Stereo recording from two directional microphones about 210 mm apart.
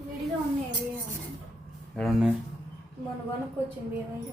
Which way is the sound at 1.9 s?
Centre (ahead or behind).